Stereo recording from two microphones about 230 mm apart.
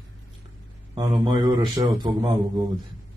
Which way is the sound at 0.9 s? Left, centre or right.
Centre.